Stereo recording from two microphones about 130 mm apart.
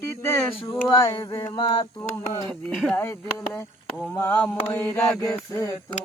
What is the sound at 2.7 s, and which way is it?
Speech, centre (ahead or behind).